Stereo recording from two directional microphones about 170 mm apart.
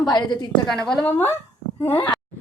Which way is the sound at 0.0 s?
25° left (ahead or behind).